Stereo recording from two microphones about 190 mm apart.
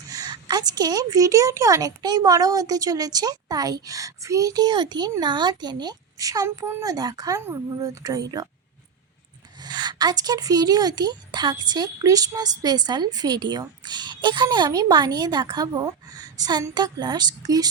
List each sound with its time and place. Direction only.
0.1 s speech: 20° right (ahead or behind)
9.6 s speech: 20° right (ahead or behind)